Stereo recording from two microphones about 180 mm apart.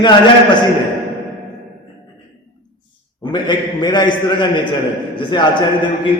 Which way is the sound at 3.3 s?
25° left (ahead or behind).